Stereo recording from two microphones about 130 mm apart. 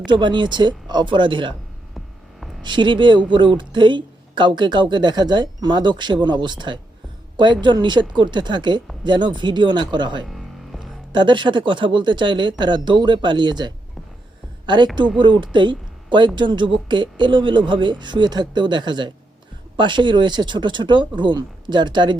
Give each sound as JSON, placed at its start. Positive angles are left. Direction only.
{"t": 0.2, "sound": "speech", "side_deg": -35}
{"t": 2.6, "sound": "speech", "side_deg": -35}
{"t": 10.2, "sound": "music", "side_deg": 0}
{"t": 11.1, "sound": "speech", "side_deg": -35}
{"t": 15.2, "sound": "speech", "side_deg": -40}